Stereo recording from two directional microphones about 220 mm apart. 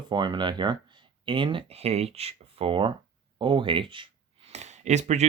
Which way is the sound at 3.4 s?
20° right (ahead or behind).